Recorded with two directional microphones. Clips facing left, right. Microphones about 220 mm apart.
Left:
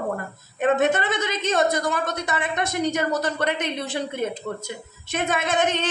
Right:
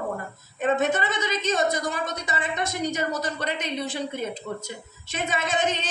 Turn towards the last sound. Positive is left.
turn(degrees=55)  # may be behind; listen again after turning